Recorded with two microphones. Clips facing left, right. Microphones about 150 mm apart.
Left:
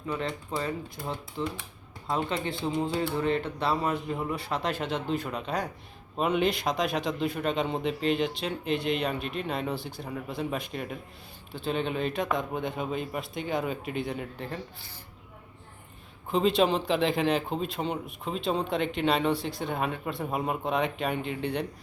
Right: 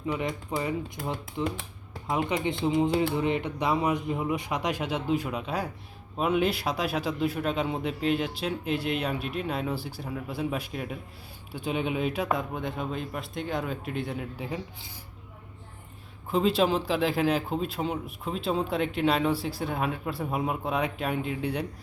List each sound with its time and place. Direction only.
0.1 s a man's voice: 15° right (ahead or behind)
16.3 s a man's voice: centre (ahead or behind)